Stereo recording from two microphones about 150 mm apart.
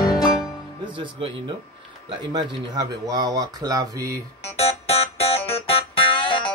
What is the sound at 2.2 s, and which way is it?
Speech, 30° right (ahead or behind).